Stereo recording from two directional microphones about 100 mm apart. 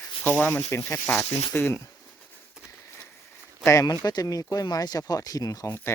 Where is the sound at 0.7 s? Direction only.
25° left (ahead or behind).